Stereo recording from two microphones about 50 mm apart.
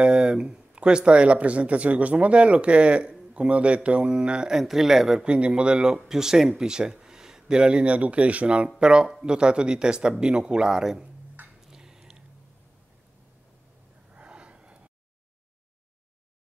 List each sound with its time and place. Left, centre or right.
0.0 s speech: centre
5.2 s speech: right
11.6 s a sound: centre
14.1 s gasp: right